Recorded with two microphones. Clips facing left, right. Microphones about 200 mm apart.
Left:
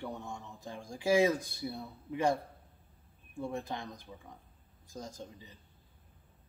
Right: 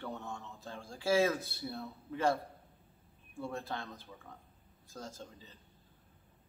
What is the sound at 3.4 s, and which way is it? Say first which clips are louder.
Speech: left 2 dB; 15° left (ahead or behind).